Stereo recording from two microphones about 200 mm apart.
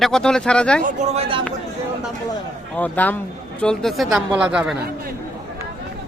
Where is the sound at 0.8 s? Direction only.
40° right (ahead or behind).